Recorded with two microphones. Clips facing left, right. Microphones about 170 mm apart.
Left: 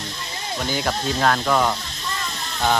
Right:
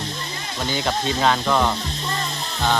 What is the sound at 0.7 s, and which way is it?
Speech, centre (ahead or behind).